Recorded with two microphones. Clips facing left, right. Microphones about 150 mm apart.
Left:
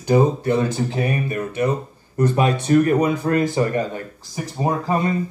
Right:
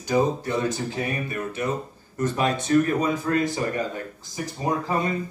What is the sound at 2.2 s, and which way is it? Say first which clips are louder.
Speech: left 5 dB; 60° left (ahead or behind).